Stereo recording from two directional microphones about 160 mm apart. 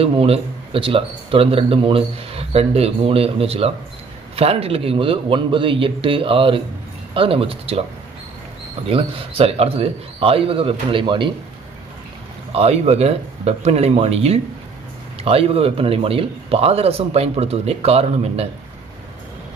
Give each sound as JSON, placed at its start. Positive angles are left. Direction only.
{"t": 0.0, "sound": "speech", "side_deg": -35}
{"t": 8.8, "sound": "speech", "side_deg": -35}
{"t": 12.5, "sound": "speech", "side_deg": -40}